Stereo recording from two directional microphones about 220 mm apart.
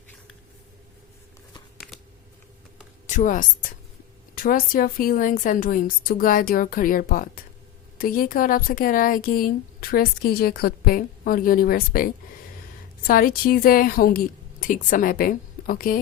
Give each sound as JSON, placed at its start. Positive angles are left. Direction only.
{"t": 1.8, "sound": "shuffling cards", "side_deg": 0}
{"t": 3.1, "sound": "speech", "side_deg": 35}